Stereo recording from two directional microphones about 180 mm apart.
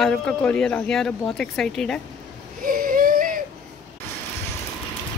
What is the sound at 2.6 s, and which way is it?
Baby cry, 50° right (ahead or behind).